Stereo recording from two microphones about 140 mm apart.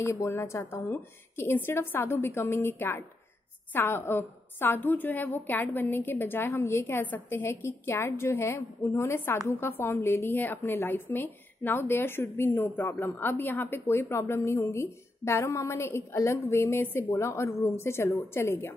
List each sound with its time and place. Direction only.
0.0 s a woman's voice: 20° left (ahead or behind)